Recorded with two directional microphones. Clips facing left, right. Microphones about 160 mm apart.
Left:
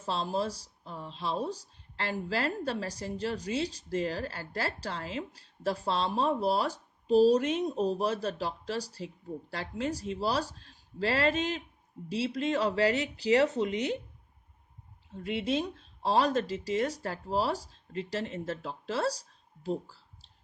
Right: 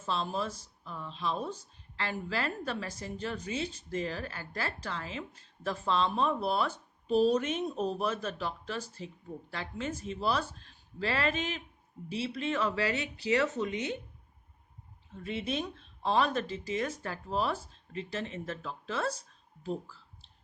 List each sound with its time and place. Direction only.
0.0 s speech: 35° left (ahead or behind)
15.1 s speech: 35° left (ahead or behind)